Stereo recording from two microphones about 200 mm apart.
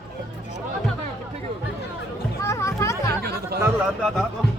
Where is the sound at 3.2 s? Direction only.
50° right (ahead or behind).